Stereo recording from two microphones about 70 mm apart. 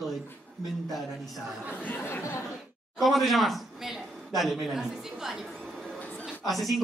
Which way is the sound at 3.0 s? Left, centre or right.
Centre.